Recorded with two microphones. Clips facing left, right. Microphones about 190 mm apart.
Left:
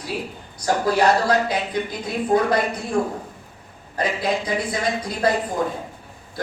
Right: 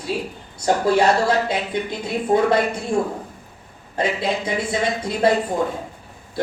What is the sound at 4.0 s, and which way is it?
Speech, 25° right (ahead or behind).